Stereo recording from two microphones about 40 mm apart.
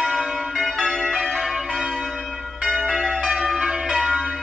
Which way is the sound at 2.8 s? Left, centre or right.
Centre.